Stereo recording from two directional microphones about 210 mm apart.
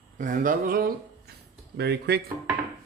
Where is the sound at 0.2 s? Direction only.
40° right (ahead or behind).